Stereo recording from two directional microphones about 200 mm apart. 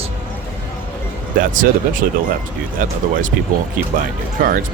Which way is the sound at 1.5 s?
40° right (ahead or behind).